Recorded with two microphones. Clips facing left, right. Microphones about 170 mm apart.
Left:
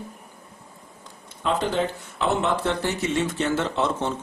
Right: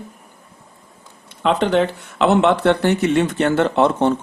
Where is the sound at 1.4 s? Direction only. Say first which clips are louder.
Right 7 dB; 70° right (ahead or behind).